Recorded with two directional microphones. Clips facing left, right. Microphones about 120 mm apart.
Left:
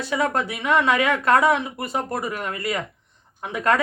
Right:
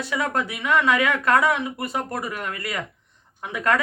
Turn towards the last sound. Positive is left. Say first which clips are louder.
# left 2 dB
turn(degrees=30)  # may be behind; listen again after turning